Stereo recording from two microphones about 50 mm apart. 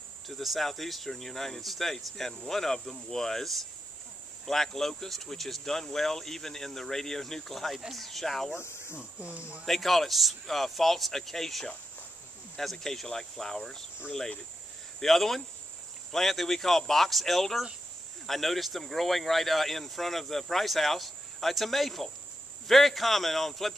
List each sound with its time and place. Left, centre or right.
0.3 s speech: centre
8.5 s speech: left
9.7 s speech: centre
15.0 s speech: centre